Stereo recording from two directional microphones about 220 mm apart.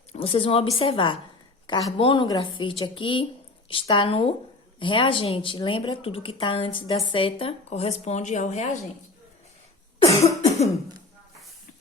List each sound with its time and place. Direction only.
0.1 s a woman's voice: 25° left (ahead or behind)
10.0 s cough: 20° left (ahead or behind)